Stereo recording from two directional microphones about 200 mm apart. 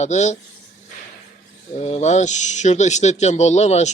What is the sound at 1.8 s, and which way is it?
Speech, 35° left (ahead or behind).